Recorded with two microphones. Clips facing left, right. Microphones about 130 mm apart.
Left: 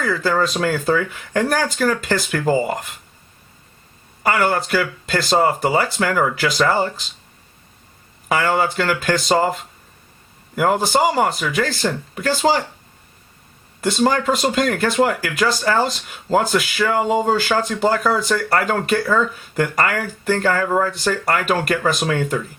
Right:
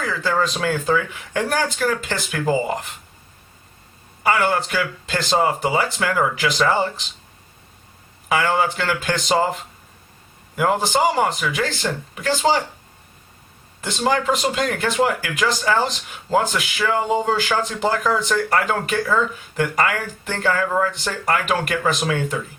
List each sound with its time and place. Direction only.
0.1 s speech: 40° left (ahead or behind)
4.2 s speech: 40° left (ahead or behind)
8.3 s speech: 40° left (ahead or behind)
10.6 s speech: 40° left (ahead or behind)
13.8 s speech: 40° left (ahead or behind)